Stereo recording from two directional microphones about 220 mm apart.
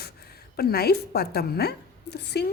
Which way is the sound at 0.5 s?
45° left (ahead or behind).